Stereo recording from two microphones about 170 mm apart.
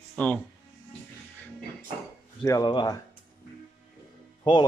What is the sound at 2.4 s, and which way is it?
Speech, 25° left (ahead or behind).